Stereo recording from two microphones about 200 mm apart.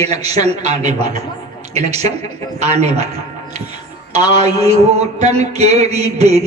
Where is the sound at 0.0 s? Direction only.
30° right (ahead or behind).